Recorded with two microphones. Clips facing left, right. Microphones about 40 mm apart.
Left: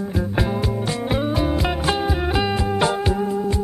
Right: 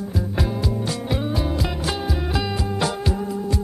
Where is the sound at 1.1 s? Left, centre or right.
Left.